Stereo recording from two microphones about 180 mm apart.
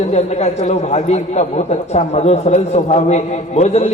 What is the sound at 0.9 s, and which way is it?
A man's voice, 40° left (ahead or behind).